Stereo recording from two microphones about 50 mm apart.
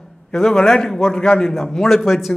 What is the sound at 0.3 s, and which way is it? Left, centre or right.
A man's voice, centre.